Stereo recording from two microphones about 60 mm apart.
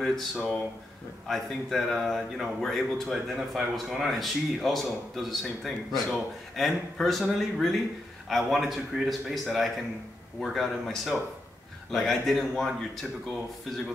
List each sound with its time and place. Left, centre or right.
0.0 s a man's voice: centre